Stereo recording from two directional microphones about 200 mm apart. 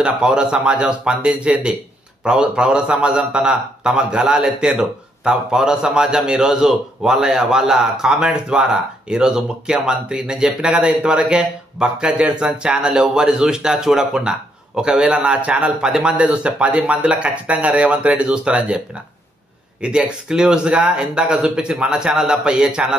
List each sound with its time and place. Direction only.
0.0 s a man's voice: 5° right (ahead or behind)
19.8 s a man's voice: 5° right (ahead or behind)